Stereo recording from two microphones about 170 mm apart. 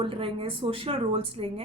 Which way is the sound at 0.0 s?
30° right (ahead or behind).